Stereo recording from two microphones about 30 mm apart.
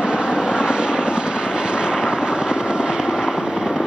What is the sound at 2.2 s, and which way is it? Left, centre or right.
Fireworks, centre.